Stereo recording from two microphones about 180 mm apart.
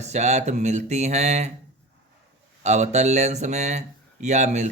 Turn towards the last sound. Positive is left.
turn(degrees=-40)  # may be behind; listen again after turning